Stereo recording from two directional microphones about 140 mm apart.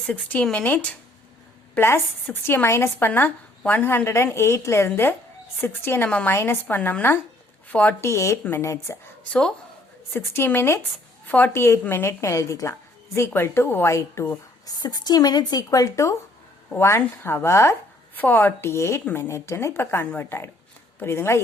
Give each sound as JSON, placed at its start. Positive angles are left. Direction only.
{"t": 0.0, "sound": "a woman's voice", "side_deg": 10}
{"t": 10.1, "sound": "a woman's voice", "side_deg": 15}